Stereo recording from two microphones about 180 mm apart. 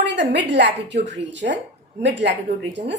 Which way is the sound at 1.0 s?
80° right.